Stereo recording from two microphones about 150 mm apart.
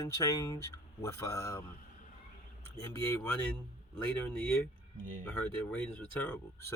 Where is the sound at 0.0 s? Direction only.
20° left (ahead or behind).